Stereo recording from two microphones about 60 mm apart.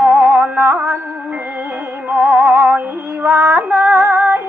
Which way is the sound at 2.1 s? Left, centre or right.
Right.